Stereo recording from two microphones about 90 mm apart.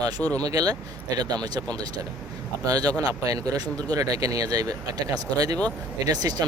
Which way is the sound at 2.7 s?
45° right (ahead or behind).